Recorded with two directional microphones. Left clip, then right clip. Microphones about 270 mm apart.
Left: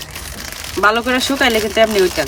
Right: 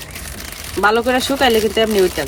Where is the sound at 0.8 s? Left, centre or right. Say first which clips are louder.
Even; centre.